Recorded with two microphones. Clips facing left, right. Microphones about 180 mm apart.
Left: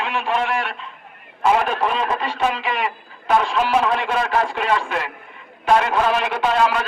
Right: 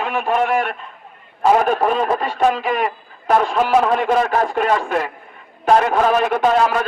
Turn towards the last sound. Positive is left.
turn(degrees=-45)  # may be behind; listen again after turning